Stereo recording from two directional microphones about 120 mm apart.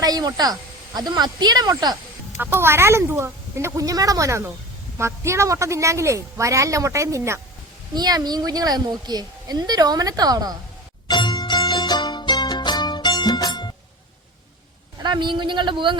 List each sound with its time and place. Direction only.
0.0 s a woman's voice: 35° right (ahead or behind)
2.4 s a woman's voice: 20° right (ahead or behind)
11.1 s music: 40° left (ahead or behind)
15.0 s a woman's voice: 40° right (ahead or behind)